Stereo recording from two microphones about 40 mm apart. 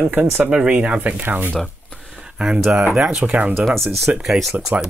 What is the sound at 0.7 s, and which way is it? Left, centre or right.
Speech, right.